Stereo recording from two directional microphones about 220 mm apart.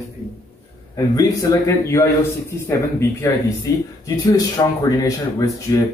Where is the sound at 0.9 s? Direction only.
15° left (ahead or behind).